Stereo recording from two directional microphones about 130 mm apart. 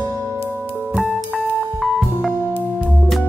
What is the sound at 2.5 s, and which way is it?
Music, 15° right (ahead or behind).